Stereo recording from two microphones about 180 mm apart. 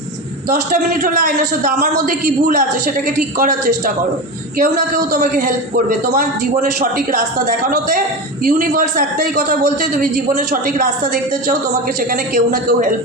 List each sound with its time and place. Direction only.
0.5 s a man's voice: 45° right (ahead or behind)